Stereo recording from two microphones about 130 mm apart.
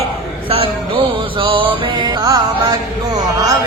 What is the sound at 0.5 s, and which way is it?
Music, 45° right (ahead or behind).